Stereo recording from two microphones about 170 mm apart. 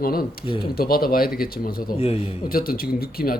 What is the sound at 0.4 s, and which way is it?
Speech, 30° left (ahead or behind).